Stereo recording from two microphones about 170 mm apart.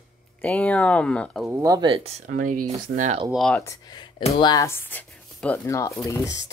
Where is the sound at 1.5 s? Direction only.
20° right (ahead or behind).